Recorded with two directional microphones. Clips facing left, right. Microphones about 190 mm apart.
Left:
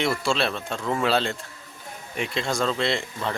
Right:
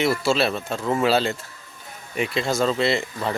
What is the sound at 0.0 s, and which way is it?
Speech, 5° right (ahead or behind).